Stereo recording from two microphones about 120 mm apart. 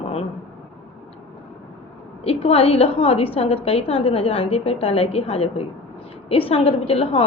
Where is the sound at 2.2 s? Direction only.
55° left (ahead or behind).